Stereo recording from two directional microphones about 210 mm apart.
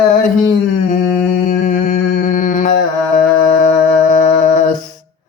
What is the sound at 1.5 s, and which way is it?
Humming, 35° left (ahead or behind).